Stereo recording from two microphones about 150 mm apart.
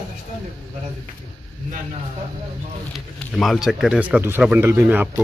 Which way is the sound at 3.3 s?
Centre (ahead or behind).